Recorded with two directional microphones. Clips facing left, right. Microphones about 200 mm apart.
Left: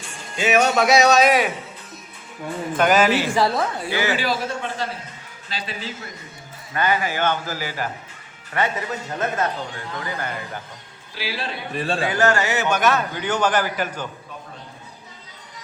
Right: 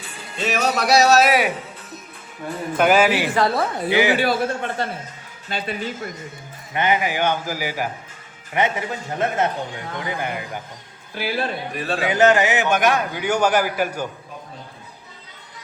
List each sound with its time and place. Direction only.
0.0 s speech: 5° right (ahead or behind)
2.7 s a man's voice: 5° right (ahead or behind)
3.8 s a man's voice: 15° right (ahead or behind)
4.2 s a man's voice: 55° right (ahead or behind)
6.7 s a man's voice: 20° right (ahead or behind)
8.5 s a man's voice: 25° right (ahead or behind)
11.1 s a man's voice: 55° right (ahead or behind)
12.0 s a man's voice: 20° right (ahead or behind)